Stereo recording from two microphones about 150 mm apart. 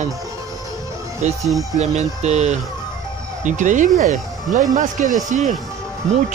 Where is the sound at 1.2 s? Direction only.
50° right (ahead or behind).